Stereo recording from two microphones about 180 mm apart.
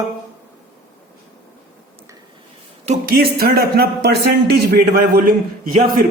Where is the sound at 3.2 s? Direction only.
55° right (ahead or behind).